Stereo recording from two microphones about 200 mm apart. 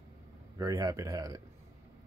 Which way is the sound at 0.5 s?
20° right (ahead or behind).